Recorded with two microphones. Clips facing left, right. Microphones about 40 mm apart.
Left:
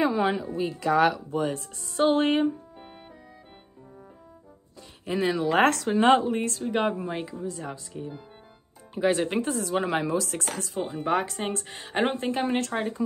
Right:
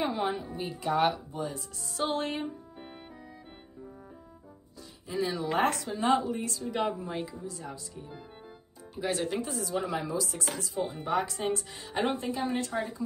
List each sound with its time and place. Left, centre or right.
0.1 s music: left
0.7 s speech: left
1.9 s music: left
5.0 s speech: left
8.9 s music: left
9.4 s speech: left